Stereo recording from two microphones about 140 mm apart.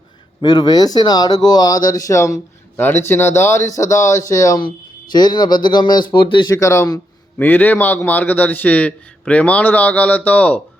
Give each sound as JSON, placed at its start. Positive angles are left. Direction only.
{"t": 0.4, "sound": "speech", "side_deg": 30}
{"t": 7.3, "sound": "a man's voice", "side_deg": 15}